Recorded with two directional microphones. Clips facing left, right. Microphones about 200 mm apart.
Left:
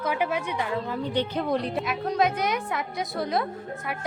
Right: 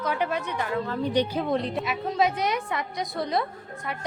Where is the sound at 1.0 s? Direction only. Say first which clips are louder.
Right 4 dB; 15° right (ahead or behind).